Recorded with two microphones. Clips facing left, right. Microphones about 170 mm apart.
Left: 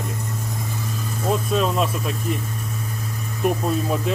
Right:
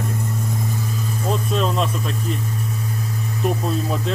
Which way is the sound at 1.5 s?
5° left (ahead or behind).